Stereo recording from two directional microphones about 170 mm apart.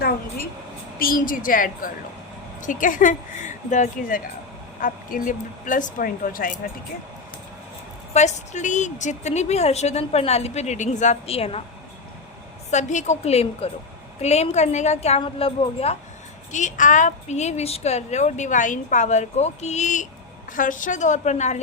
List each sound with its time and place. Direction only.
0.9 s a woman's voice: 55° left (ahead or behind)
8.1 s a woman's voice: 45° left (ahead or behind)
12.7 s a woman's voice: 45° left (ahead or behind)
16.5 s a woman's voice: 45° left (ahead or behind)